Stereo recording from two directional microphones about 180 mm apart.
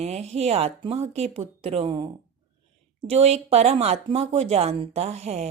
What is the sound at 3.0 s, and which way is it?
Speech, 35° right (ahead or behind).